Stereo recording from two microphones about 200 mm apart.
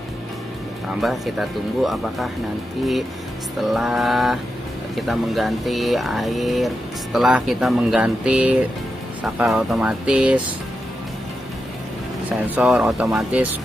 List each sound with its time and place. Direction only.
1.0 s speech: centre (ahead or behind)
12.3 s speech: 5° right (ahead or behind)